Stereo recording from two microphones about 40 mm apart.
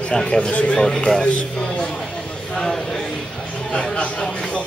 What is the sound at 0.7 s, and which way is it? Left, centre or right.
Speech, centre.